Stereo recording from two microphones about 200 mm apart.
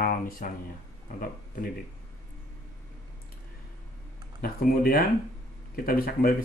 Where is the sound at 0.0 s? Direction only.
45° left (ahead or behind).